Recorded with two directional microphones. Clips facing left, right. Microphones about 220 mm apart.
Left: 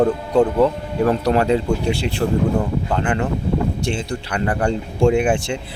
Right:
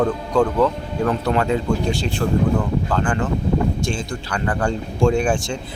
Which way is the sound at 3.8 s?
65° left (ahead or behind).